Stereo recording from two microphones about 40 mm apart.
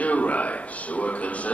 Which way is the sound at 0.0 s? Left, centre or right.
Left.